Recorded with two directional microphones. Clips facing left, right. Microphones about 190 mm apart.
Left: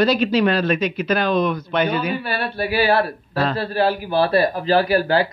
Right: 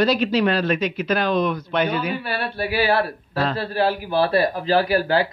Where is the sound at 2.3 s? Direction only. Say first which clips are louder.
Left 2 dB; 40° left (ahead or behind).